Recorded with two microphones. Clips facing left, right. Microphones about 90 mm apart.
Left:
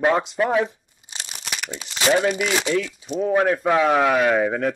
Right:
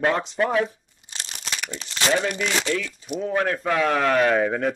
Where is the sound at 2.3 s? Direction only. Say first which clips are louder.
Left 3 dB; 10° left (ahead or behind).